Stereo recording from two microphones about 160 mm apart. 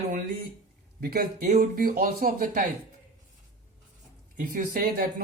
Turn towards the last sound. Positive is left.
turn(degrees=-60)  # may be behind; listen again after turning